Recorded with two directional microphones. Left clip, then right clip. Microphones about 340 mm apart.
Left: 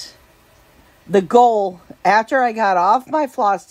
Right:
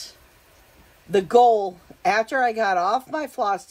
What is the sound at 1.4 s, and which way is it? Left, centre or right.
Speech, left.